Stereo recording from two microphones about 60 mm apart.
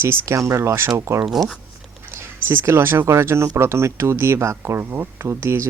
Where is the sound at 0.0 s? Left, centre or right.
Right.